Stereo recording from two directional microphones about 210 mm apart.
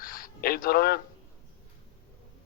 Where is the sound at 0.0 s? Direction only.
45° left (ahead or behind).